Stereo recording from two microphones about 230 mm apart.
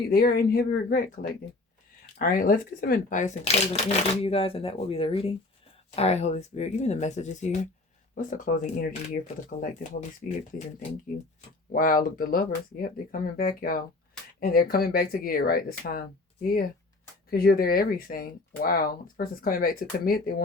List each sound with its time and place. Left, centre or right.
0.1 s speech: left
11.3 s speech: left